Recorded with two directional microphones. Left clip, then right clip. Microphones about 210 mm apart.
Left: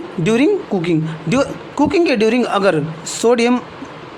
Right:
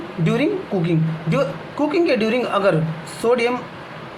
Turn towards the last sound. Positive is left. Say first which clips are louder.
# left 4 dB
turn(degrees=55)  # may be behind; listen again after turning